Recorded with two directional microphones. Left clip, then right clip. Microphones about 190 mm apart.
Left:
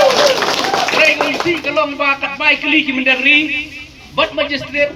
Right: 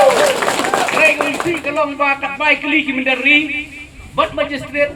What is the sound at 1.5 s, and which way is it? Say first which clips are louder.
A man's voice: left 2 dB; 35° left (ahead or behind).